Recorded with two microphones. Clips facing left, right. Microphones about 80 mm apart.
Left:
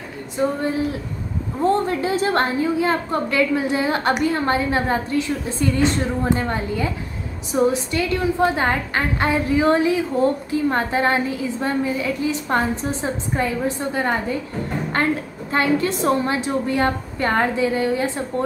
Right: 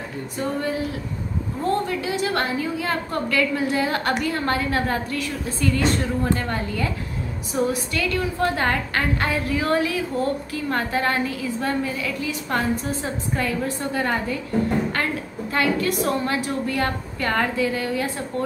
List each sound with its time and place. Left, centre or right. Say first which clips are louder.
1.6 s a woman's voice: left 5 dB; left
15.5 s a woman's voice: left 2 dB; left